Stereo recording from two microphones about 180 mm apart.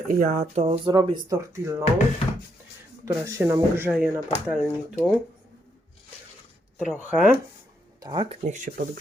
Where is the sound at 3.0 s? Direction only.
15° right (ahead or behind).